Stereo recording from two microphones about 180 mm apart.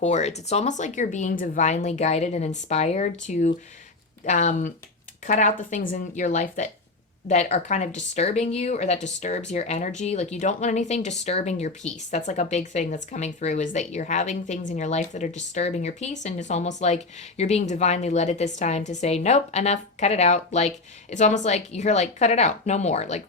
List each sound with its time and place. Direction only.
0.0 s speech: 40° left (ahead or behind)